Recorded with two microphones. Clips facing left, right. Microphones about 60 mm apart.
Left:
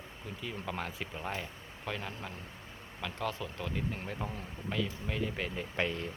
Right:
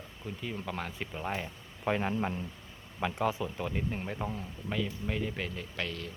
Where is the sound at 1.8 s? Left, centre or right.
Right.